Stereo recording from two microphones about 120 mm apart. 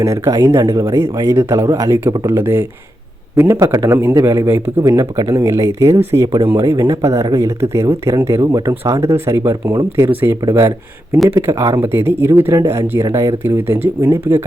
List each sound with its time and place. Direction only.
0.0 s speech: 25° right (ahead or behind)